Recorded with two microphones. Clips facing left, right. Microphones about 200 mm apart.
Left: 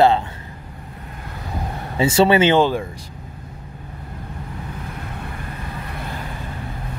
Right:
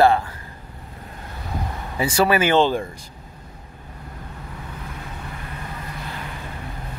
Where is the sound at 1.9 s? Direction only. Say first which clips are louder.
Left 4 dB; 25° left (ahead or behind).